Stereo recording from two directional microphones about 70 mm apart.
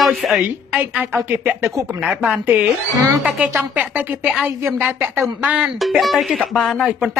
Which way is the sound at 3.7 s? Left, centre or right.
Right.